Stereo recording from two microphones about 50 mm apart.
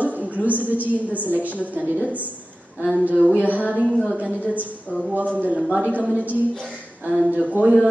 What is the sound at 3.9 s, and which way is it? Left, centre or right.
Speech, centre.